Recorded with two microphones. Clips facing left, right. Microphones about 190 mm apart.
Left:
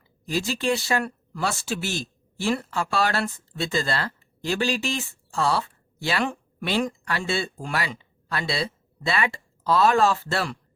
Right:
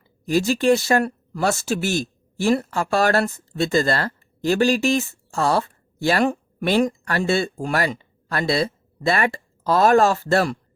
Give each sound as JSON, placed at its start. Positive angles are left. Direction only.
{"t": 0.3, "sound": "speech", "side_deg": -50}